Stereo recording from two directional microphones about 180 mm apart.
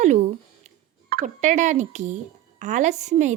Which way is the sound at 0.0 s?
40° right (ahead or behind).